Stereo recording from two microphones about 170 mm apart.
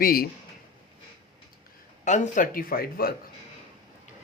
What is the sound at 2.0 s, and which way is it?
Speech, 45° left (ahead or behind).